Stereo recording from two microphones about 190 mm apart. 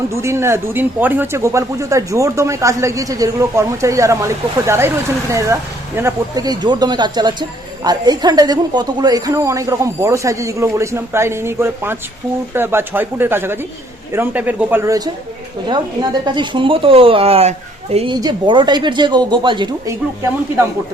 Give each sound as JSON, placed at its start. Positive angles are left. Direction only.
{"t": 0.1, "sound": "speech", "side_deg": -15}
{"t": 16.2, "sound": "speech", "side_deg": -25}